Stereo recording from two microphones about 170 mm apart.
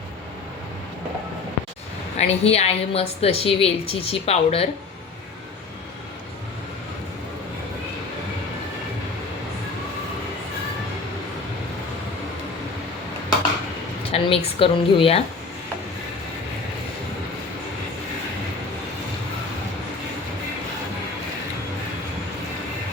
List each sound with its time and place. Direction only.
2.1 s a woman's voice: 40° left (ahead or behind)
14.0 s a woman's voice: 35° left (ahead or behind)